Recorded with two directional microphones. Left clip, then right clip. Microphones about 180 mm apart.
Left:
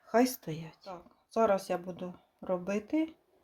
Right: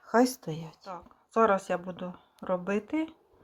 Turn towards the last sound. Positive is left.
turn(degrees=0)  # may be behind; listen again after turning